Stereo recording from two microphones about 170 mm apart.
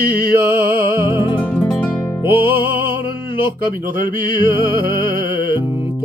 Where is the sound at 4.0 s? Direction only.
55° right (ahead or behind).